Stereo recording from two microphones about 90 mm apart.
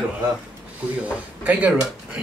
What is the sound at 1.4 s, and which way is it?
Speech, 15° right (ahead or behind).